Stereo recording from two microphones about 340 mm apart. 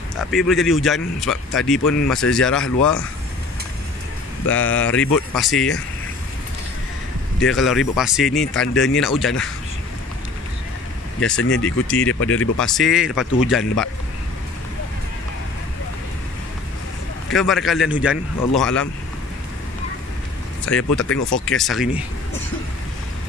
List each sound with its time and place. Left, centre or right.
0.2 s speech: centre
4.5 s speech: centre
7.3 s speech: centre
11.4 s speech: left
11.9 s speech: centre
12.2 s speech: left
12.5 s speech: centre
17.3 s speech: centre
20.6 s speech: centre
21.0 s speech: left
21.5 s speech: centre